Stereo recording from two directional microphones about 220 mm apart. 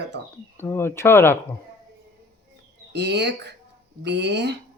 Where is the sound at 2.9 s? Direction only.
50° right (ahead or behind).